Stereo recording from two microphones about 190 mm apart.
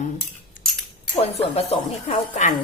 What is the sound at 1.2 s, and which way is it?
A woman's voice, 30° left (ahead or behind).